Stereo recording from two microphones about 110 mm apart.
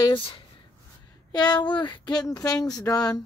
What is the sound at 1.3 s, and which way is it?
A woman's voice, 40° left (ahead or behind).